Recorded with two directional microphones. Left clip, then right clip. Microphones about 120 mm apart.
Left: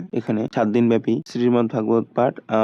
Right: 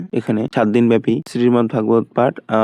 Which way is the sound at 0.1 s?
50° right (ahead or behind).